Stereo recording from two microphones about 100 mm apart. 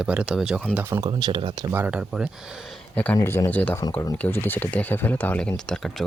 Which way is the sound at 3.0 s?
15° left (ahead or behind).